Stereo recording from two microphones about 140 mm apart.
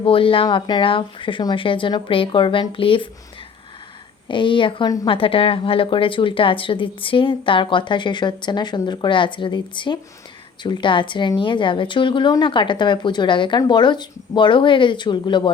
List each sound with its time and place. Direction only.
0.0 s a woman's voice: 40° left (ahead or behind)
4.3 s a woman's voice: 35° left (ahead or behind)